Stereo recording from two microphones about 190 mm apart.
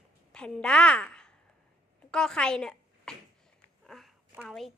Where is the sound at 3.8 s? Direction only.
Centre (ahead or behind).